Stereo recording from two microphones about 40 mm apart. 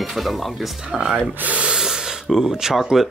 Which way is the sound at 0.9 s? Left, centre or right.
Centre.